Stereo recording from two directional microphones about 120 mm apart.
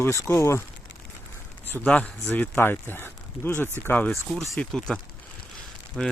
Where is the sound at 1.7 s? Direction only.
10° left (ahead or behind).